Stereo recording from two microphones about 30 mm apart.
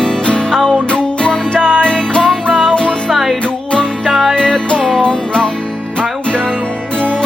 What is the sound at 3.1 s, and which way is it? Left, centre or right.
Music, centre.